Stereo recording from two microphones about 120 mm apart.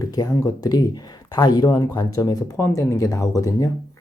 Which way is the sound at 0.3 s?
30° left (ahead or behind).